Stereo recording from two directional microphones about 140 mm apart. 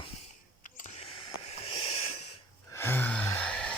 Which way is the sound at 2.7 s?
15° left (ahead or behind).